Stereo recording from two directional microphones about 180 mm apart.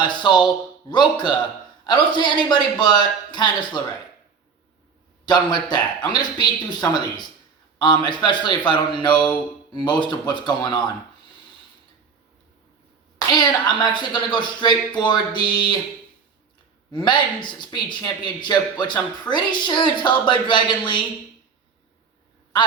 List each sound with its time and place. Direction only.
0.0 s speech: 25° left (ahead or behind)
5.2 s speech: 25° left (ahead or behind)
13.3 s speech: 25° left (ahead or behind)
16.9 s speech: 25° left (ahead or behind)